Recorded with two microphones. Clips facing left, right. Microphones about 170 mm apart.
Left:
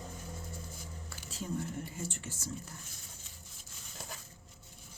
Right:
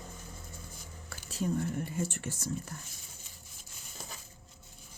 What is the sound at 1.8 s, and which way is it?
Speech, 60° right (ahead or behind).